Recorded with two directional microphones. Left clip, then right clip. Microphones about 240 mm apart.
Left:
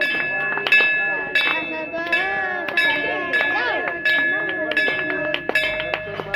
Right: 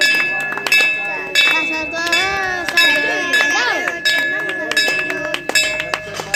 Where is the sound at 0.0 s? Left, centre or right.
Right.